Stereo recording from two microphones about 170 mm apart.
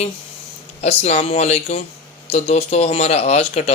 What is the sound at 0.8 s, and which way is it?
Speech, 40° left (ahead or behind).